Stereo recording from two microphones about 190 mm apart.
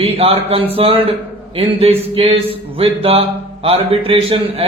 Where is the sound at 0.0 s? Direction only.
30° right (ahead or behind).